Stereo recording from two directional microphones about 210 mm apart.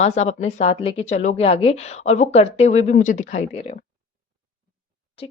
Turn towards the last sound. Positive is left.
turn(degrees=30)  # may be behind; listen again after turning